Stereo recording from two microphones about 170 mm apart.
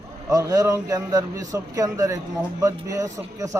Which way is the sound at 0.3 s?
20° right (ahead or behind).